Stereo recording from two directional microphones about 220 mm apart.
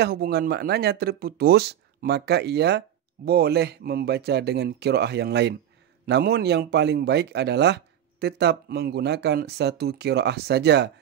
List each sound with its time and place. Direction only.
0.0 s speech: 45° right (ahead or behind)